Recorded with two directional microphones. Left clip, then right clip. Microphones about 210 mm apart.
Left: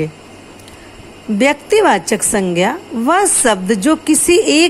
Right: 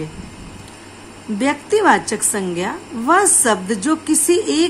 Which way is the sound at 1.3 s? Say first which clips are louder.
Left 5 dB; 25° left (ahead or behind).